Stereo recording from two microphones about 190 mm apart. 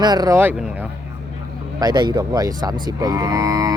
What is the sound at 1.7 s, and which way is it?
Cattle, 20° right (ahead or behind).